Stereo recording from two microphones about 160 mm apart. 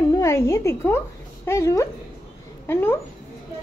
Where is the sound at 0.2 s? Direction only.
20° left (ahead or behind).